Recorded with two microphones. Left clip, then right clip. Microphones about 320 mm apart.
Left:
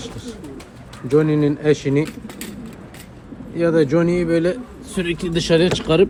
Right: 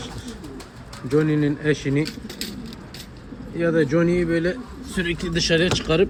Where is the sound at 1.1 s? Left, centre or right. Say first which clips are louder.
Left 4 dB; left.